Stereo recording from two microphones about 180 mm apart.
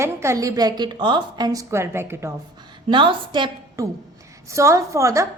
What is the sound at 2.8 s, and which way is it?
A woman's voice, 25° right (ahead or behind).